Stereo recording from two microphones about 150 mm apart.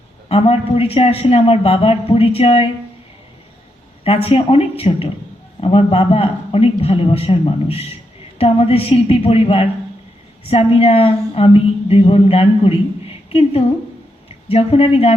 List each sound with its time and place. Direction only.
0.3 s a woman's voice: 40° left (ahead or behind)
4.0 s a woman's voice: 40° left (ahead or behind)